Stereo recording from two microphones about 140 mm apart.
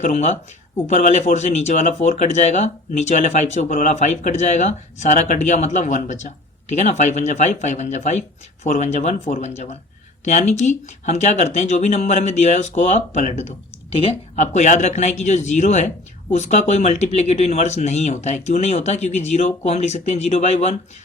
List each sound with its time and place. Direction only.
0.0 s speech: 55° left (ahead or behind)
13.9 s speech: 45° left (ahead or behind)